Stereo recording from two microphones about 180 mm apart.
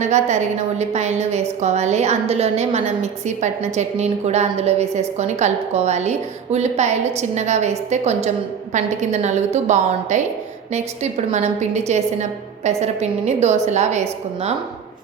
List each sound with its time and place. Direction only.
0.0 s a woman's voice: 40° right (ahead or behind)